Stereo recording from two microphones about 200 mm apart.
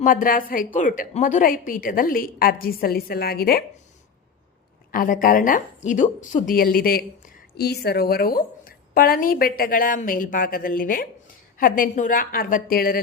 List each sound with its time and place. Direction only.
0.0 s a woman's voice: 45° left (ahead or behind)
4.9 s a woman's voice: 45° left (ahead or behind)